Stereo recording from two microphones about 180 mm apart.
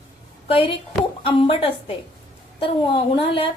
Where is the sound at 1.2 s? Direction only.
30° left (ahead or behind).